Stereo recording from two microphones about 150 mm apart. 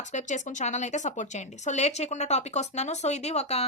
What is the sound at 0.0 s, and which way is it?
Speech, 50° left (ahead or behind).